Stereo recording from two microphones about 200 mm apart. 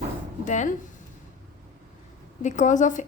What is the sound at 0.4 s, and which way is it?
Speech, 35° left (ahead or behind).